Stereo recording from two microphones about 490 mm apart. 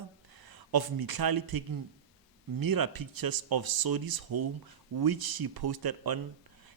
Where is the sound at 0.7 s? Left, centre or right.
Right.